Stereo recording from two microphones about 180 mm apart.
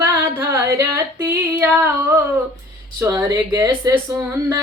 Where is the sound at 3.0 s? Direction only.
15° right (ahead or behind).